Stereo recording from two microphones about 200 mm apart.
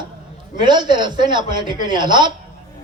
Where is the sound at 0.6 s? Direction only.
20° right (ahead or behind).